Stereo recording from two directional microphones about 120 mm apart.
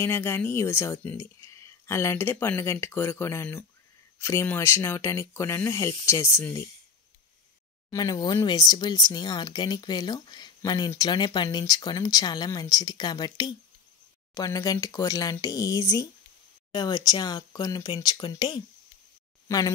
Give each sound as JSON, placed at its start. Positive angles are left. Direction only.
{"t": 0.0, "sound": "speech", "side_deg": 20}
{"t": 7.9, "sound": "speech", "side_deg": 35}